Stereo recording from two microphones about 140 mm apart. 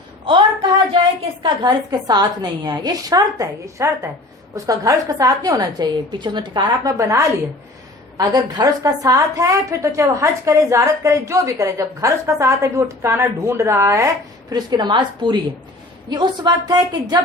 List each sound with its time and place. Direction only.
1.4 s a woman's voice: 30° right (ahead or behind)
14.5 s a woman's voice: 30° right (ahead or behind)